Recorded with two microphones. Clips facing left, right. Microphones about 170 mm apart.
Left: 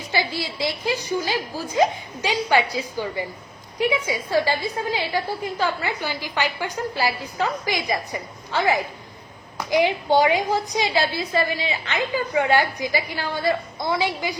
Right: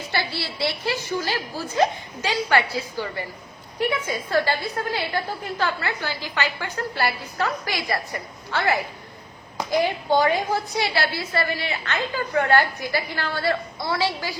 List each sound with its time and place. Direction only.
0.1 s a woman's voice: 15° left (ahead or behind)